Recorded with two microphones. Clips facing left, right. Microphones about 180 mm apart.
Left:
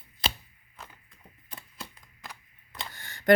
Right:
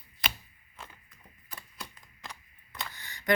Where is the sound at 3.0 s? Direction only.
50° left (ahead or behind).